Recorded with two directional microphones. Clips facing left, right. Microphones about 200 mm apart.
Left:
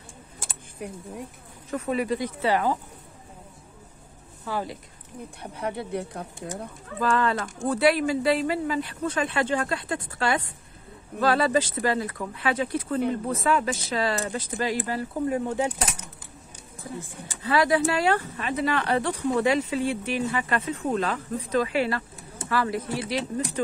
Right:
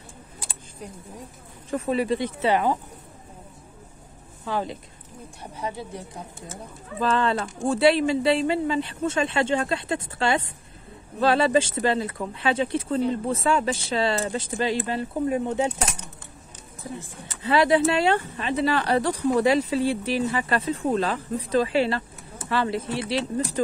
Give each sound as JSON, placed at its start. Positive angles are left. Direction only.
{"t": 0.4, "sound": "a sound", "side_deg": 45}
{"t": 1.7, "sound": "speech", "side_deg": -30}
{"t": 4.5, "sound": "speech", "side_deg": -20}
{"t": 5.4, "sound": "speech", "side_deg": 60}
{"t": 7.0, "sound": "speech", "side_deg": -25}
{"t": 17.4, "sound": "speech", "side_deg": -25}